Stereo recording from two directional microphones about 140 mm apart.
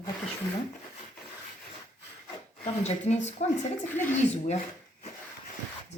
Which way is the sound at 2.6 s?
55° left (ahead or behind).